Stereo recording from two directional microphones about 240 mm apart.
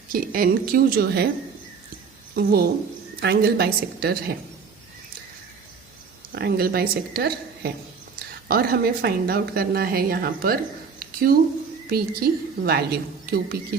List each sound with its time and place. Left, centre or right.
0.1 s a woman's voice: right
2.3 s a woman's voice: right
6.3 s a woman's voice: right
11.0 s a sound: right
11.9 s a woman's voice: right